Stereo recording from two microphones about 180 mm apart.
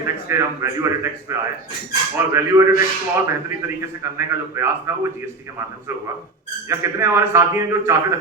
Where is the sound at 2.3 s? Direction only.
15° right (ahead or behind).